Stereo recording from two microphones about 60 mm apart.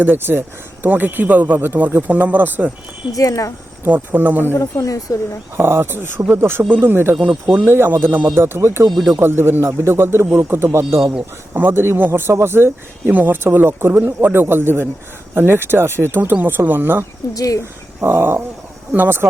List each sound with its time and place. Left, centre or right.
0.0 s speech: right
1.6 s speech: right
3.1 s speech: left
3.8 s speech: right
4.5 s speech: left
5.6 s speech: right
11.5 s speech: right
17.3 s speech: left
18.0 s speech: right